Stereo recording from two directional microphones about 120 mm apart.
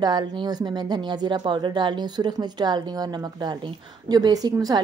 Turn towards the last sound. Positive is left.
turn(degrees=-30)  # may be behind; listen again after turning